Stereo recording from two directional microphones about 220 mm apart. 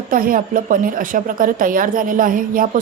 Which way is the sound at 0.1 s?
40° right (ahead or behind).